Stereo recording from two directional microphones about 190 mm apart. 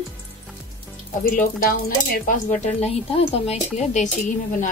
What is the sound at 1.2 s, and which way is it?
Speech, 50° left (ahead or behind).